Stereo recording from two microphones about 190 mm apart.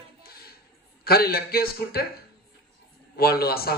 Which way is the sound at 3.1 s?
55° left (ahead or behind).